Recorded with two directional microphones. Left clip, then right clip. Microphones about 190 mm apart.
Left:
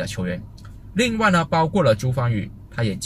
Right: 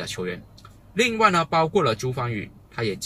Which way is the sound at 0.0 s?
10° left (ahead or behind).